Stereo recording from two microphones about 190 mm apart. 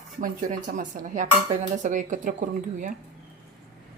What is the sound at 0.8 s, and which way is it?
Speech, 45° right (ahead or behind).